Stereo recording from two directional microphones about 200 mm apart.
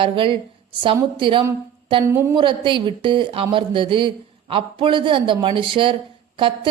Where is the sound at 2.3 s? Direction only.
25° right (ahead or behind).